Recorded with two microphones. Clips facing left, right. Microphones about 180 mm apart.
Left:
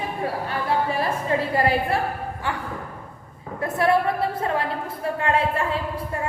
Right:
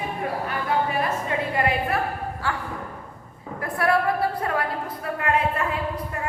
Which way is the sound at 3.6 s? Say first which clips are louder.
Left 2 dB; 25° left (ahead or behind).